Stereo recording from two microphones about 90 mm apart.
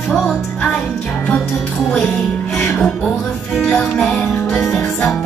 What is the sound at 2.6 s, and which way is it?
Music, 20° left (ahead or behind).